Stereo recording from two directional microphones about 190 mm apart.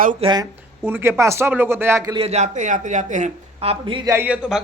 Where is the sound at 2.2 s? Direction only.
35° right (ahead or behind).